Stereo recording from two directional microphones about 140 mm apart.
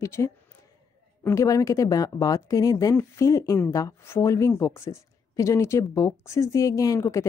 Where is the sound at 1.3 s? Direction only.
25° left (ahead or behind).